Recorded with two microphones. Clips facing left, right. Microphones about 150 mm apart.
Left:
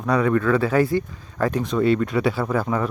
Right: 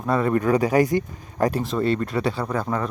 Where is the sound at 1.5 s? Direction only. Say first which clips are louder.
Left 6 dB; 5° right (ahead or behind).